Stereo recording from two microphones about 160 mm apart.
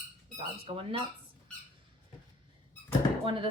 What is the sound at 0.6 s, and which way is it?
Speech, 35° right (ahead or behind).